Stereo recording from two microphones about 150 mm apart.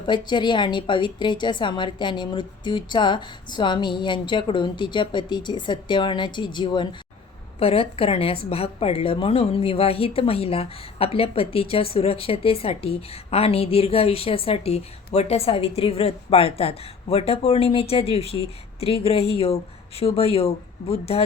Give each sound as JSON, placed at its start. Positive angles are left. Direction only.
{"t": 0.1, "sound": "a woman's voice", "side_deg": 30}